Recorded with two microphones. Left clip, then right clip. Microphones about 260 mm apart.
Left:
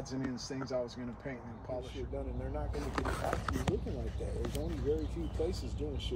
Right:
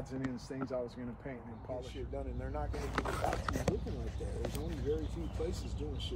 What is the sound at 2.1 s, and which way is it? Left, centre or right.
Speech, right.